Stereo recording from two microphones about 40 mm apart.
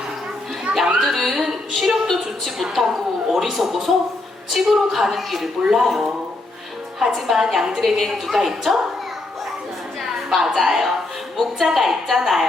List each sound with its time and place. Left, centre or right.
0.7 s a child's voice: right
1.0 s a woman's voice: centre
7.3 s a woman's voice: centre
10.2 s a woman's voice: centre